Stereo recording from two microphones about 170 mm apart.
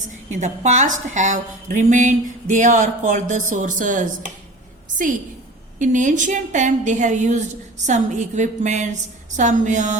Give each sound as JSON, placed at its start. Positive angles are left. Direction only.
{"t": 0.0, "sound": "a woman's voice", "side_deg": -45}
{"t": 5.8, "sound": "a woman's voice", "side_deg": -50}